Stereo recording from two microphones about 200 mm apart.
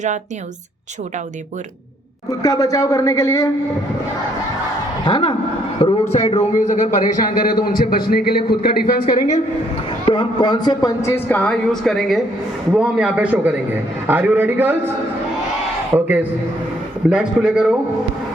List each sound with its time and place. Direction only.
2.4 s a man's voice: 15° left (ahead or behind)
5.0 s a man's voice: 25° left (ahead or behind); by 9.0 s 50° left (ahead or behind)
9.0 s a woman's voice: 35° left (ahead or behind); by 14.8 s 10° right (ahead or behind)
17.1 s a man's voice: 5° right (ahead or behind)